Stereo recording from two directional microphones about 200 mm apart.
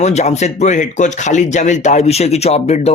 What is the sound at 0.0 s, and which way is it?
A man's voice, 35° left (ahead or behind).